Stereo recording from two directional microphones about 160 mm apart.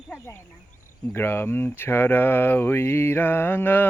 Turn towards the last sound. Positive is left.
turn(degrees=10)  # may be behind; listen again after turning